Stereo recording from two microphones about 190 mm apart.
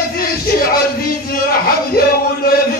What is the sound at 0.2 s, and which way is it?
Music, 50° left (ahead or behind).